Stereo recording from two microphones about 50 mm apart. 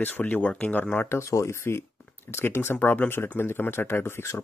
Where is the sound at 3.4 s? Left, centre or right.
Left.